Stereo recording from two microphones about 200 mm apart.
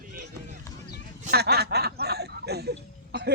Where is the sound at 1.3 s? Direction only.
55° right (ahead or behind).